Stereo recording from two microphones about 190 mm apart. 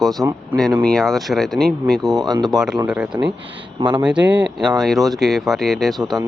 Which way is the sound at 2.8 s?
5° right (ahead or behind).